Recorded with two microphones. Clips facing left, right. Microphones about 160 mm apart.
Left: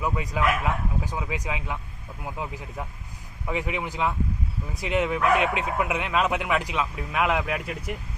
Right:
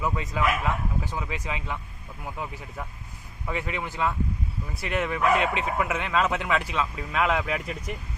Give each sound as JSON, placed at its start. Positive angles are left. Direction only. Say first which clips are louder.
{"t": 0.0, "sound": "speech", "louder": "left 1 dB", "side_deg": 15}